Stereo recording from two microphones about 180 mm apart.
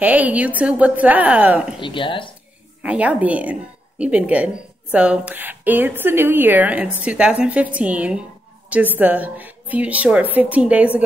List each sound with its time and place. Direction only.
0.0 s a woman's voice: 10° right (ahead or behind)
1.8 s speech: 30° left (ahead or behind)
2.8 s a woman's voice: 5° right (ahead or behind)